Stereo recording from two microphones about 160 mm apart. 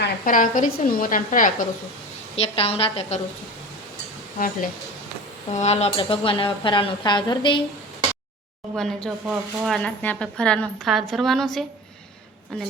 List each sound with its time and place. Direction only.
0.0 s a woman's voice: 60° left (ahead or behind)
2.3 s speech: 40° left (ahead or behind)
4.4 s a woman's voice: 60° left (ahead or behind)
5.5 s speech: 45° left (ahead or behind)
8.7 s a woman's voice: 5° left (ahead or behind)
9.2 s speech: 10° right (ahead or behind)
9.7 s a woman's voice: 10° left (ahead or behind)